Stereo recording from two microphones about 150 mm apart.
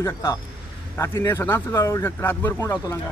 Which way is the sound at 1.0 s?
20° left (ahead or behind).